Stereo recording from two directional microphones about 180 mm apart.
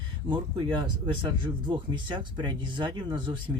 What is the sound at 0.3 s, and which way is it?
Speech, 25° right (ahead or behind).